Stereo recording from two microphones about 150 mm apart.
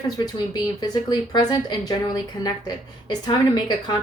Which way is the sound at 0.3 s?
30° left (ahead or behind).